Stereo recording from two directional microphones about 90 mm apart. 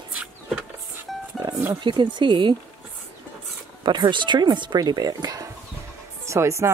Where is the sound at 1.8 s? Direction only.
55° right (ahead or behind).